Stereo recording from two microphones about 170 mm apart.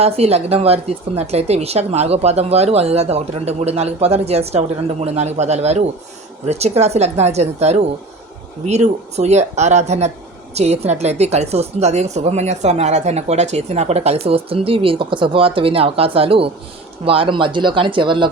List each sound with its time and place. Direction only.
0.0 s a woman's voice: 40° right (ahead or behind)